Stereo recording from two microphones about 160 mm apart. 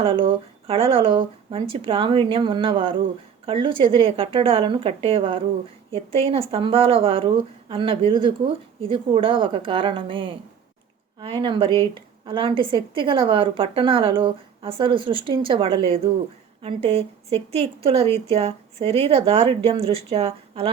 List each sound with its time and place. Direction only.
0.0 s a woman's voice: 35° right (ahead or behind)